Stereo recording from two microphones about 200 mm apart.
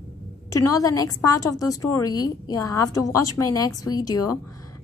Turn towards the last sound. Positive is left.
turn(degrees=20)  # may be behind; listen again after turning